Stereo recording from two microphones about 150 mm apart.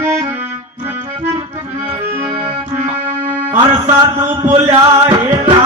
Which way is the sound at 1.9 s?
40° right (ahead or behind).